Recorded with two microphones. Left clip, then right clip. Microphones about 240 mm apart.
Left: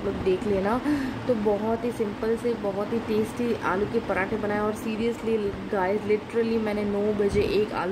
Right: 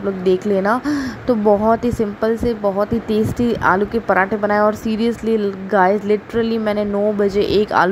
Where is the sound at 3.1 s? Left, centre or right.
Right.